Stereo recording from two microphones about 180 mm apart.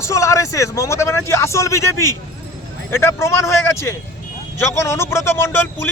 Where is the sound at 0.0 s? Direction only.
15° left (ahead or behind).